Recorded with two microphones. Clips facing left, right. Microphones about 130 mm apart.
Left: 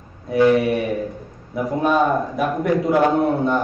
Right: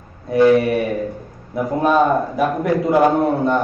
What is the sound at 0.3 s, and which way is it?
A man's voice, centre (ahead or behind).